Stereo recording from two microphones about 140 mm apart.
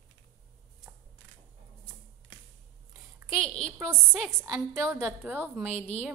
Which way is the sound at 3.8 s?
20° right (ahead or behind).